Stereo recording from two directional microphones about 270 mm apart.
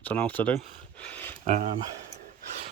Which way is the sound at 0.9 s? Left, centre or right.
Centre.